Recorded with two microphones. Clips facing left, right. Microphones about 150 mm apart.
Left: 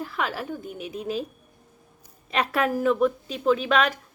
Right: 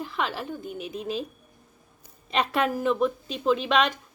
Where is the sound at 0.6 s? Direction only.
10° left (ahead or behind).